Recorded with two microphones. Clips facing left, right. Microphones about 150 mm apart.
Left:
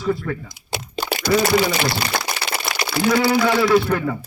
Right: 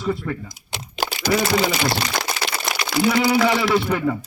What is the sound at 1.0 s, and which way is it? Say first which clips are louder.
Typing: even; 90° right.